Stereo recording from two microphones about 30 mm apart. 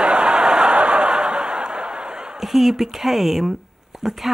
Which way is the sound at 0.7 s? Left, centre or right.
Right.